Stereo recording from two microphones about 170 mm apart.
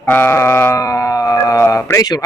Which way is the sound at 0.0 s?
15° left (ahead or behind).